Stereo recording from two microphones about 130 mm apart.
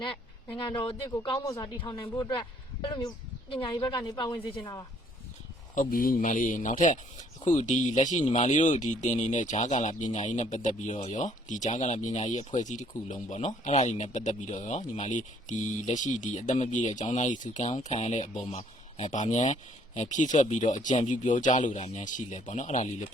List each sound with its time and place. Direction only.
0.5 s a man's voice: 40° left (ahead or behind)
5.7 s a man's voice: 90° left; by 23.0 s 65° left (ahead or behind)